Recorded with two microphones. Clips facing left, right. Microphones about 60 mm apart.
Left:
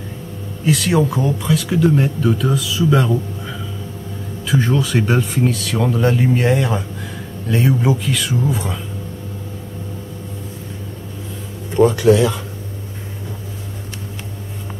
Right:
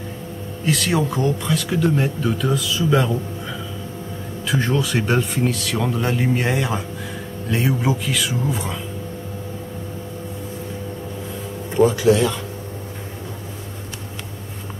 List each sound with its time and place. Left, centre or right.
0.7 s speech: centre
11.7 s speech: centre